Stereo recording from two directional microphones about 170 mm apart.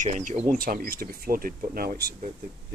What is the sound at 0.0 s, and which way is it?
Speech, 45° right (ahead or behind).